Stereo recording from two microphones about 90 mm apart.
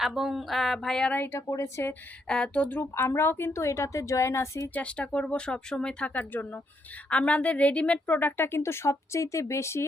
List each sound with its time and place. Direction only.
0.0 s a sound: 5° right (ahead or behind)
1.1 s a woman's voice: 25° left (ahead or behind)
2.2 s speech: 10° left (ahead or behind)
2.9 s a woman's voice: 25° left (ahead or behind)
4.7 s a woman's voice: 15° left (ahead or behind); by 9.8 s 30° left (ahead or behind)